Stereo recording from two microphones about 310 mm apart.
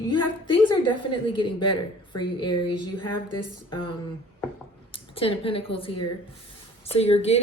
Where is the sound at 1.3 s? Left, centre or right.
Centre.